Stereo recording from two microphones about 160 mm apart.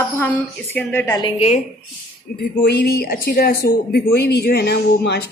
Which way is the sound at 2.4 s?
70° left (ahead or behind).